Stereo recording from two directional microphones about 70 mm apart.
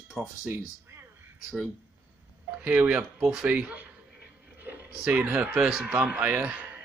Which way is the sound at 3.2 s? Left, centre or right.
Centre.